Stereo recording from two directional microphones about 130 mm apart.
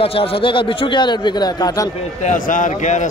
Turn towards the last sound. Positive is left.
turn(degrees=70)  # may be behind; listen again after turning